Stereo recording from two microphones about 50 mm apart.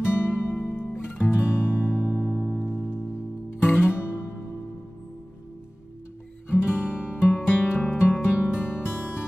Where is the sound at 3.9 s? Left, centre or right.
Left.